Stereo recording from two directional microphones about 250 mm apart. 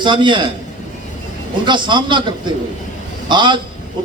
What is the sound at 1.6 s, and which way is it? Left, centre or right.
Speech, centre.